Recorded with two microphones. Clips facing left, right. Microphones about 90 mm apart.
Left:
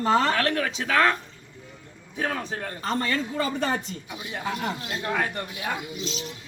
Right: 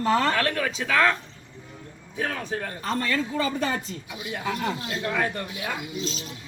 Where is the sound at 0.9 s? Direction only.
20° left (ahead or behind).